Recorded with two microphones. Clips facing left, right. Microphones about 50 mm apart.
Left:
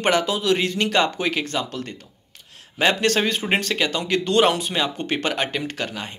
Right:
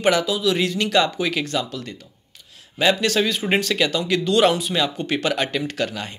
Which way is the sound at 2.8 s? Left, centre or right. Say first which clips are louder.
Even; left.